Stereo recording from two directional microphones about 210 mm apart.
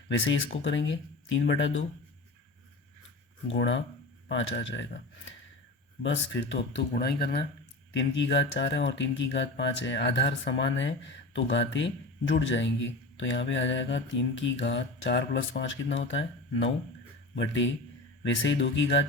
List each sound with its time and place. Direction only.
0.6 s speech: 60° left (ahead or behind)
3.5 s speech: 60° left (ahead or behind)
6.0 s speech: 60° left (ahead or behind)
6.7 s speech: 50° left (ahead or behind)
7.9 s speech: 60° left (ahead or behind)